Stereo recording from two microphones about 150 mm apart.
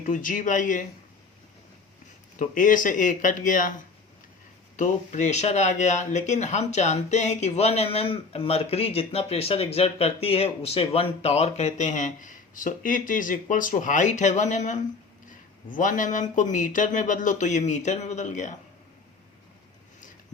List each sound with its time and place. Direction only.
0.0 s speech: 60° left (ahead or behind)
2.4 s speech: 60° left (ahead or behind)
4.8 s speech: 50° left (ahead or behind)